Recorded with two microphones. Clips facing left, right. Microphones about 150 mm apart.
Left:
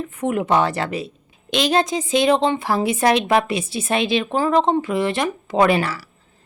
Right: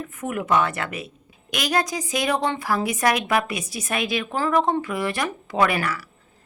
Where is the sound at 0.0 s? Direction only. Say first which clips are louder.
Left 6 dB; 25° left (ahead or behind).